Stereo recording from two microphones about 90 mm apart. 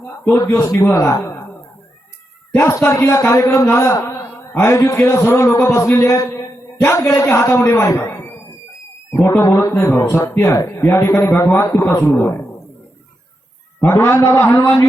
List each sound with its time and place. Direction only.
0.4 s a man's voice: 35° left (ahead or behind)
2.6 s a man's voice: 35° left (ahead or behind)
9.4 s a man's voice: 40° left (ahead or behind)
12.1 s a man's voice: 20° left (ahead or behind)
13.8 s a man's voice: 25° left (ahead or behind)